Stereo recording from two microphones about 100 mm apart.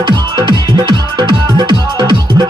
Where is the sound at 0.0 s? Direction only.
45° right (ahead or behind).